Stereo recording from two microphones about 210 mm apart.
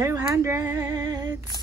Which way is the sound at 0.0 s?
10° right (ahead or behind).